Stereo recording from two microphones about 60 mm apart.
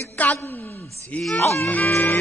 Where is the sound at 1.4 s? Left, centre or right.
Left.